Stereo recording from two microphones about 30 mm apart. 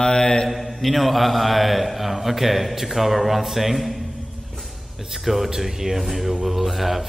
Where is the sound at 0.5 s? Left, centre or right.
Centre.